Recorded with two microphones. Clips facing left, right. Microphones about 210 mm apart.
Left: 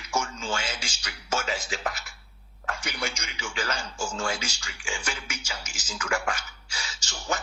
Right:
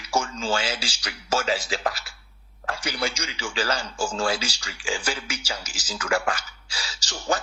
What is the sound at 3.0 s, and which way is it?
Speech, 30° right (ahead or behind).